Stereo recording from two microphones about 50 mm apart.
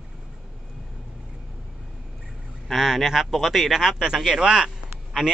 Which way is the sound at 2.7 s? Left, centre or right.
Centre.